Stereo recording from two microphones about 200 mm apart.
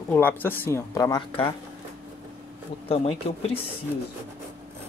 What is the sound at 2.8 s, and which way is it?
Speech, 30° left (ahead or behind).